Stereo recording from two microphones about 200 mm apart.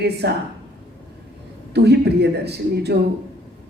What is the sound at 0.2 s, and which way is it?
Speech, 55° right (ahead or behind).